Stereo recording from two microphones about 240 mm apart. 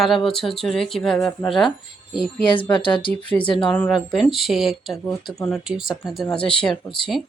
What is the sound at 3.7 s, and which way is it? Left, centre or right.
Speech, centre.